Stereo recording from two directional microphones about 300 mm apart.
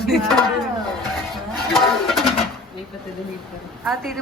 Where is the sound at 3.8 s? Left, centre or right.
Centre.